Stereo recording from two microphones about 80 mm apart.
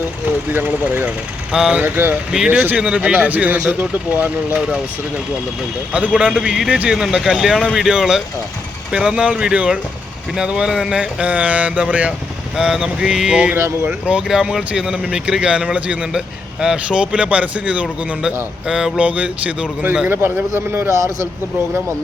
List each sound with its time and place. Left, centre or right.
0.5 s speech: right
1.5 s speech: centre
1.8 s speech: right
5.9 s speech: centre
12.5 s speech: centre
13.6 s speech: right
14.1 s speech: centre; by 21.1 s right